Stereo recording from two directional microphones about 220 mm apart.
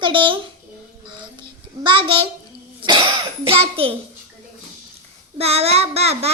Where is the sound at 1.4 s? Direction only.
20° right (ahead or behind).